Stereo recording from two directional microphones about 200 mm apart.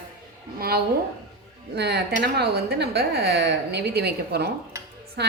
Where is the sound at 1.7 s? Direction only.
55° right (ahead or behind).